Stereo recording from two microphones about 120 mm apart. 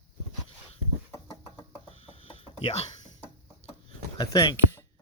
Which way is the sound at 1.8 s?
60° left (ahead or behind).